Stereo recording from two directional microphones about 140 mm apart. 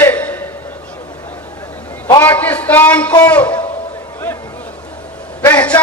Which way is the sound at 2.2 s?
15° left (ahead or behind).